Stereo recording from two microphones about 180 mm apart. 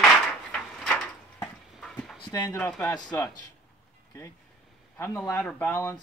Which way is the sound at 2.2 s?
20° left (ahead or behind).